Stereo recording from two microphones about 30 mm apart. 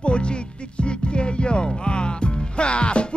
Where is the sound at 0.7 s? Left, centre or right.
Left.